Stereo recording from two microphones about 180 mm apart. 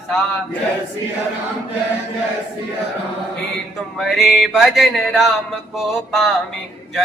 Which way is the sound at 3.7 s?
Centre (ahead or behind).